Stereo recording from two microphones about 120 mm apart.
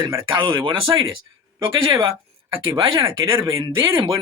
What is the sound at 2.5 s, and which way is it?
Speech, 45° right (ahead or behind).